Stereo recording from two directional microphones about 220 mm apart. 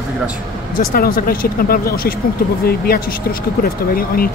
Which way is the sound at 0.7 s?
40° left (ahead or behind).